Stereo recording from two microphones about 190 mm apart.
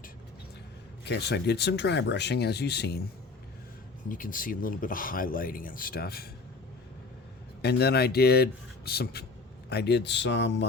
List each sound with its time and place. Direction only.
1.0 s speech: 60° left (ahead or behind)
4.1 s speech: 45° left (ahead or behind)
7.6 s speech: 60° left (ahead or behind)